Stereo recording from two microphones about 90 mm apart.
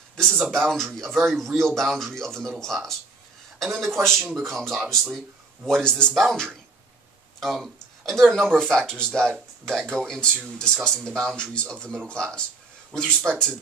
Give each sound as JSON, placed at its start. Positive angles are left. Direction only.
{"t": 0.1, "sound": "a man's voice", "side_deg": 5}